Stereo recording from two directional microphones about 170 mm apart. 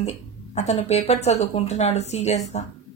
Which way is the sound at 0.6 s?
40° left (ahead or behind).